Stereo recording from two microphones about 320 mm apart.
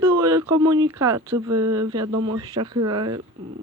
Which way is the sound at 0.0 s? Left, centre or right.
Centre.